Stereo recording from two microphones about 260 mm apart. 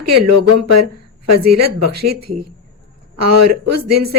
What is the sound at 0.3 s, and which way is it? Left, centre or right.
Speech, right.